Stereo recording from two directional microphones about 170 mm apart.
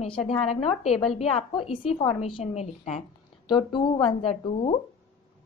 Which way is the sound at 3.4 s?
25° left (ahead or behind).